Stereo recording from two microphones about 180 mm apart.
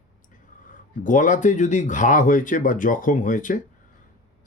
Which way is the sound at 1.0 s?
45° left (ahead or behind).